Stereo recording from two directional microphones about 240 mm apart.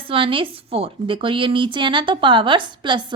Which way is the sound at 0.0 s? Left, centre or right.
Right.